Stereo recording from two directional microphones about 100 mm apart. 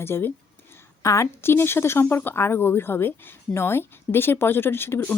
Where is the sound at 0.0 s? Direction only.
25° left (ahead or behind).